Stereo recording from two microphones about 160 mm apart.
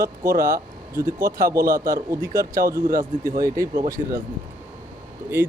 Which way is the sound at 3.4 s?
20° right (ahead or behind).